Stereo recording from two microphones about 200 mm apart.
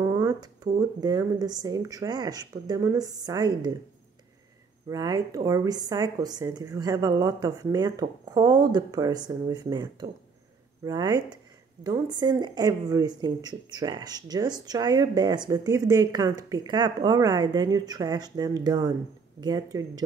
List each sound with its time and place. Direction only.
0.0 s a woman's voice: 15° right (ahead or behind)
4.8 s a woman's voice: 20° right (ahead or behind)